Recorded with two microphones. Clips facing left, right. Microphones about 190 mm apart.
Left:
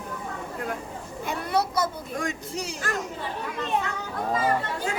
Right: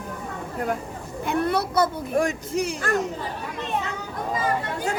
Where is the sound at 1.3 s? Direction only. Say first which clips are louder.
Right 3 dB; 60° right (ahead or behind).